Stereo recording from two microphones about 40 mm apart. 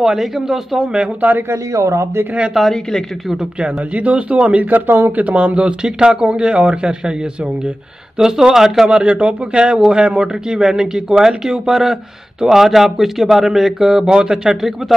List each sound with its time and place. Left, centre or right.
0.0 s speech: centre
2.6 s speech: centre
3.9 s speech: right
4.6 s speech: right
5.3 s a man's voice: right
8.2 s speech: centre
8.8 s a man's voice: right
10.2 s speech: centre